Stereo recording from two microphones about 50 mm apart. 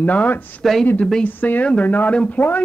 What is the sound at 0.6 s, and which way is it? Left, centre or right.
Speech, centre.